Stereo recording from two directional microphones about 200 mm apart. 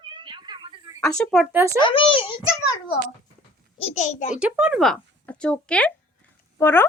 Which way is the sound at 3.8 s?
35° left (ahead or behind).